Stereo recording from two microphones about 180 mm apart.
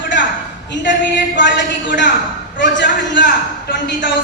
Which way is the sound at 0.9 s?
75° left (ahead or behind).